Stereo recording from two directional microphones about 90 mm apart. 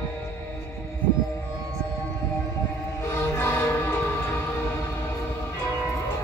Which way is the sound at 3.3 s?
25° left (ahead or behind).